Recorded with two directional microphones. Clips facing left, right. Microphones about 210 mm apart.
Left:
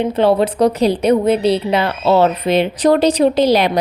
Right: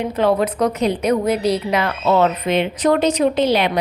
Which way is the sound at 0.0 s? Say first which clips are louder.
Left 4 dB; 30° left (ahead or behind).